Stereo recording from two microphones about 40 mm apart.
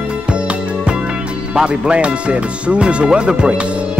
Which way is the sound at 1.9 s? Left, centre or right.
Right.